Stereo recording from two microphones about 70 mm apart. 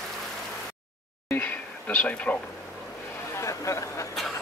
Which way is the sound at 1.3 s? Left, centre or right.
Left.